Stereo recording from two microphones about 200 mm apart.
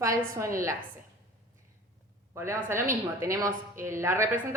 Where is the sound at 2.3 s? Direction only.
15° right (ahead or behind).